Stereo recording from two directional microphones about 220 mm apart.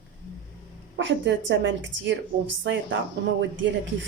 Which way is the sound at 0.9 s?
55° right (ahead or behind).